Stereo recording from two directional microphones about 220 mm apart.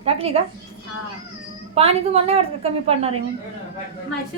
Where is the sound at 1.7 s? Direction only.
25° right (ahead or behind).